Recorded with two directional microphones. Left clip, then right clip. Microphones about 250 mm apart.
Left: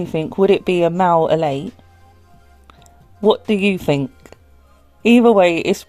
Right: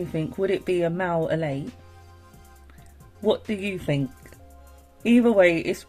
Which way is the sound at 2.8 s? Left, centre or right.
Left.